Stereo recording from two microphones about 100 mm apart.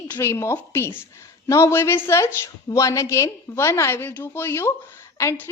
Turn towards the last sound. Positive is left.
turn(degrees=30)  # may be behind; listen again after turning